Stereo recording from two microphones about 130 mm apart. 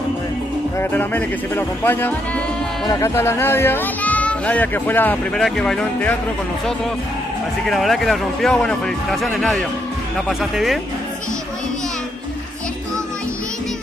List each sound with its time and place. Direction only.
0.7 s speech: 15° left (ahead or behind)
5.4 s speech: 5° left (ahead or behind)
7.6 s speech: centre (ahead or behind)